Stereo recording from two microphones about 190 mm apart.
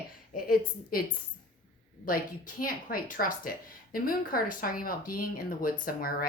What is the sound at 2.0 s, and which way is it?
Speech, 45° left (ahead or behind).